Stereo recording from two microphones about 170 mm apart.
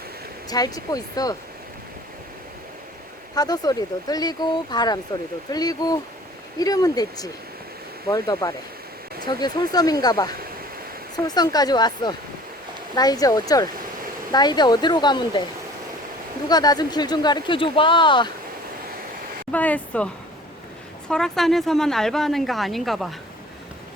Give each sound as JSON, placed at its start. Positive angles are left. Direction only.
{"t": 0.5, "sound": "speech", "side_deg": 20}
{"t": 3.3, "sound": "speech", "side_deg": 25}
{"t": 16.5, "sound": "speech", "side_deg": 25}
{"t": 19.5, "sound": "speech", "side_deg": 10}
{"t": 21.1, "sound": "speech", "side_deg": 0}